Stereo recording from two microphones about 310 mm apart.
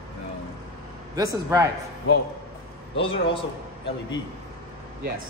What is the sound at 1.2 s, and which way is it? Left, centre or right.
Speech, centre.